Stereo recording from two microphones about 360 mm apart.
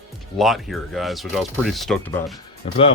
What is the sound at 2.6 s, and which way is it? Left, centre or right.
Speech, centre.